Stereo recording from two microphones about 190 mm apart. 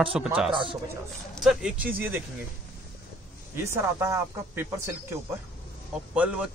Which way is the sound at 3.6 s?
15° right (ahead or behind).